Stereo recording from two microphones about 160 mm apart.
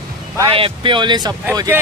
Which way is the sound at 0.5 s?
35° right (ahead or behind).